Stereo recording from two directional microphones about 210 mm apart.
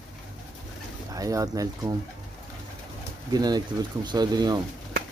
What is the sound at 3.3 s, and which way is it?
Speech, 20° right (ahead or behind).